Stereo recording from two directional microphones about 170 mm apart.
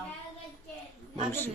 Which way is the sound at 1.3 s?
10° left (ahead or behind).